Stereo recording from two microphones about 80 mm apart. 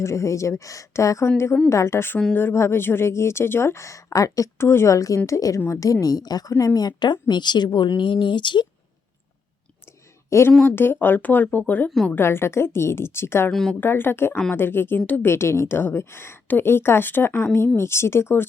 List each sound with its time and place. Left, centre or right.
0.0 s a woman's voice: left
6.7 s speech: left
9.8 s clicking: left
10.7 s a woman's voice: left
11.9 s speech: centre
12.1 s speech: left
13.5 s speech: centre
13.7 s a woman's voice: left
15.3 s a woman's voice: left